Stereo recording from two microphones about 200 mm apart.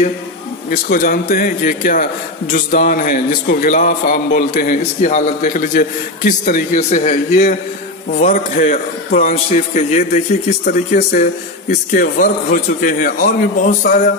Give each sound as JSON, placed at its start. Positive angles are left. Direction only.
{"t": 0.7, "sound": "a man's voice", "side_deg": 45}